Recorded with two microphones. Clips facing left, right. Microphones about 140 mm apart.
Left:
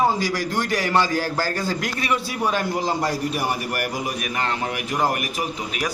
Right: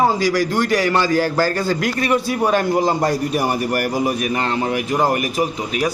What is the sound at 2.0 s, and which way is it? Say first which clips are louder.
A man's voice: right 6 dB; 45° right (ahead or behind).